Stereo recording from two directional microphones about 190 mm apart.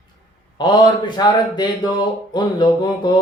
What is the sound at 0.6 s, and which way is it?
A man's voice, 25° left (ahead or behind).